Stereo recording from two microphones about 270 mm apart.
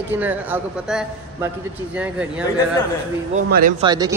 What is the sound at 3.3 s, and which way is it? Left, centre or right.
Speech, right.